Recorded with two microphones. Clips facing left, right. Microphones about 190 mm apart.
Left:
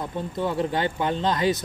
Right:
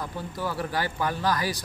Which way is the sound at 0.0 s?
25° left (ahead or behind).